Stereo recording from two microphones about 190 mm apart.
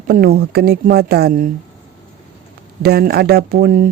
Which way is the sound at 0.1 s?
55° right (ahead or behind).